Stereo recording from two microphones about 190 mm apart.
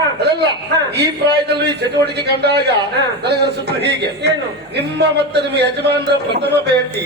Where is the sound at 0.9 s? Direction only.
65° right (ahead or behind).